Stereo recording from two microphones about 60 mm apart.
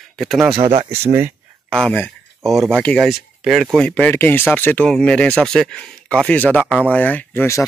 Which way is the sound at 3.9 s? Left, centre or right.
Left.